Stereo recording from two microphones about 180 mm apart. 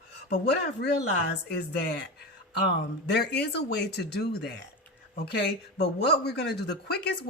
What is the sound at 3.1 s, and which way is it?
Speech, 65° left (ahead or behind).